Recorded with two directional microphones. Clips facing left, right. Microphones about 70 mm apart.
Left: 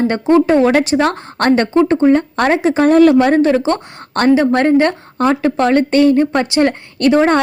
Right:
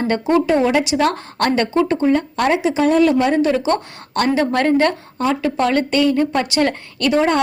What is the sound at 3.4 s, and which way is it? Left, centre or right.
Speech, left.